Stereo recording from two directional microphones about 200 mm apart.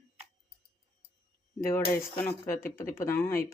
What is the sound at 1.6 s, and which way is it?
Speech, 15° left (ahead or behind).